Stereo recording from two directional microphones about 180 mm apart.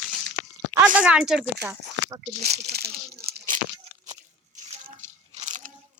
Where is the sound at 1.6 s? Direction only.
20° right (ahead or behind).